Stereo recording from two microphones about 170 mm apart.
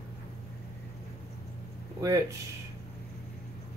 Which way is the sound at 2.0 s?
20° right (ahead or behind).